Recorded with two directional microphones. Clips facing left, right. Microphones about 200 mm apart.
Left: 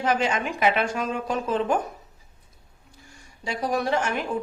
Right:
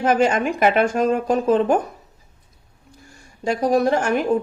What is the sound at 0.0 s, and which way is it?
A woman's voice, 50° right (ahead or behind).